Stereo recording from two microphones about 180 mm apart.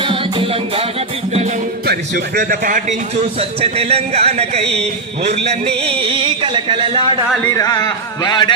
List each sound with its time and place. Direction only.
0.0 s music: 30° right (ahead or behind)
1.9 s a man's voice: 65° right (ahead or behind); by 2.8 s 50° right (ahead or behind)
3.6 s speech: 35° right (ahead or behind)
7.5 s speech: 20° left (ahead or behind)